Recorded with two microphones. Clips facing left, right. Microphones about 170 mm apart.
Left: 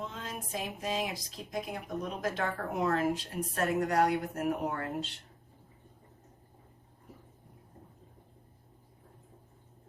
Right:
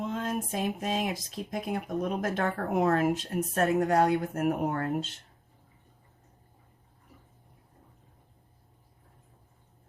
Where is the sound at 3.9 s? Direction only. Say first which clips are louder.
Right 2 dB; 25° right (ahead or behind).